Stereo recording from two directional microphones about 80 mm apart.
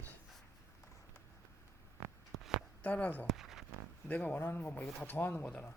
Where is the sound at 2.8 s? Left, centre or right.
Centre.